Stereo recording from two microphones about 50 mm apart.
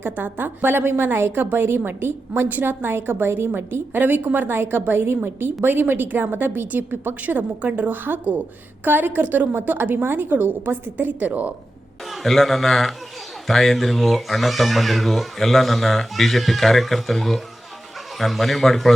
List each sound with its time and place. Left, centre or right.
0.0 s a woman's voice: right
10.9 s a woman's voice: right
12.0 s speech: centre